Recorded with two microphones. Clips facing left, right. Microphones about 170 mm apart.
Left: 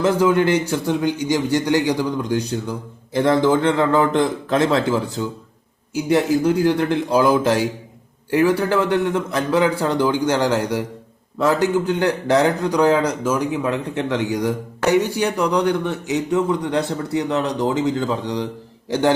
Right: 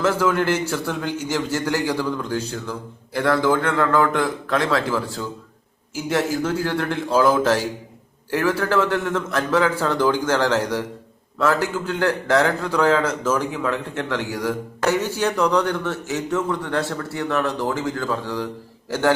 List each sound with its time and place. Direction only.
0.0 s a man's voice: 15° left (ahead or behind)